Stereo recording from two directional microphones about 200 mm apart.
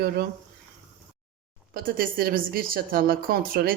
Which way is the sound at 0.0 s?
50° right (ahead or behind).